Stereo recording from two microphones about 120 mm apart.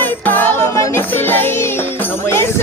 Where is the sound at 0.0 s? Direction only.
15° left (ahead or behind).